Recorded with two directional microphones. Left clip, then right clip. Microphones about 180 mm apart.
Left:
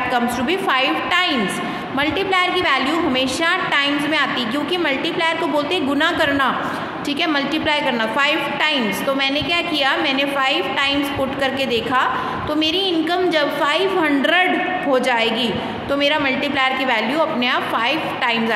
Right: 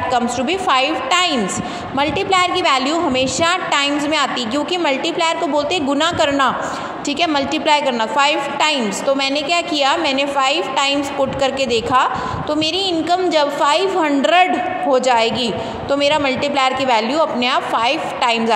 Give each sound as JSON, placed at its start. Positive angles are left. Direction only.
{"t": 0.1, "sound": "a woman's voice", "side_deg": -35}
{"t": 5.9, "sound": "a woman's voice", "side_deg": -30}
{"t": 13.1, "sound": "a woman's voice", "side_deg": -30}